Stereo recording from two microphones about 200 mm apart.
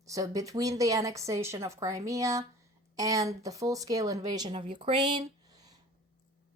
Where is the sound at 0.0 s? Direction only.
15° right (ahead or behind).